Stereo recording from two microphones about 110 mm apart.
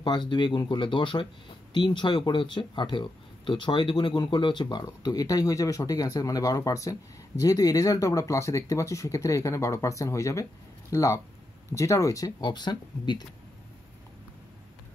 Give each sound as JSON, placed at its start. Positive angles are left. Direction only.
{"t": 0.0, "sound": "speech", "side_deg": 45}
{"t": 12.4, "sound": "speech", "side_deg": 40}